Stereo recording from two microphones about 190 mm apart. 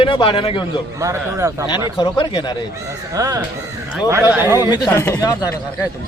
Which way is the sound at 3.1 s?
20° right (ahead or behind).